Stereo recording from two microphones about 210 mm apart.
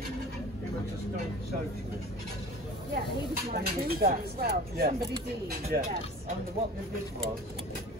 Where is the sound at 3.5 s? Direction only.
45° right (ahead or behind).